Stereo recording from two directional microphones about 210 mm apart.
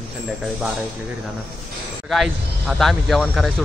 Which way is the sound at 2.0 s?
Centre (ahead or behind).